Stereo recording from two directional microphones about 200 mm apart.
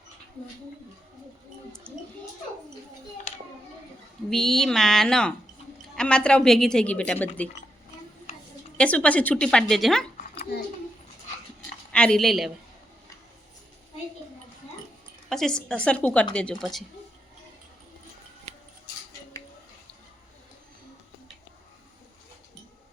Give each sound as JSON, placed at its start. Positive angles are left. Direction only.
{"t": 4.3, "sound": "a woman's voice", "side_deg": 0}
{"t": 8.8, "sound": "a woman's voice", "side_deg": 5}
{"t": 10.2, "sound": "a sound", "side_deg": 50}
{"t": 11.9, "sound": "a woman's voice", "side_deg": 5}
{"t": 15.3, "sound": "a woman's voice", "side_deg": 0}
{"t": 18.5, "sound": "scissors", "side_deg": -35}